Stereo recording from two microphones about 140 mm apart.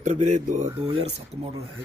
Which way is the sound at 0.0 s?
60° right (ahead or behind).